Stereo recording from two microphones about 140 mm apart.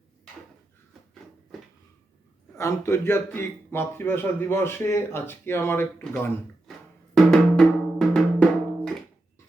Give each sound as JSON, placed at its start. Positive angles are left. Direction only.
{"t": 2.6, "sound": "a man's voice", "side_deg": 20}
{"t": 7.1, "sound": "drum", "side_deg": 5}